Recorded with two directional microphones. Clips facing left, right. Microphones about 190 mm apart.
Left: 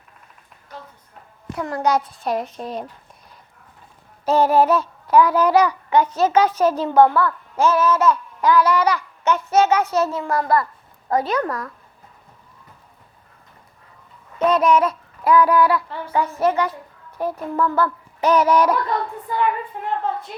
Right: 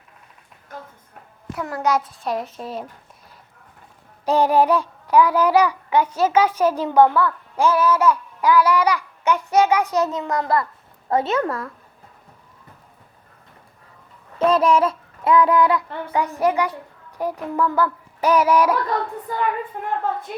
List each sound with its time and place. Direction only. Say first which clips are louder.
1.5 s a child's voice: left 1 dB; centre (ahead or behind)
4.3 s child singing: left 1 dB; 15° right (ahead or behind)
11.1 s a woman's voice: even; 25° right (ahead or behind)
14.3 s child singing: even; 30° right (ahead or behind); by 18.8 s 10° right (ahead or behind)
19.3 s a woman's voice: left 3 dB; 45° right (ahead or behind)